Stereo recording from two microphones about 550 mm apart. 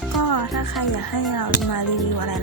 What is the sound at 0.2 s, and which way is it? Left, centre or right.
Music, left.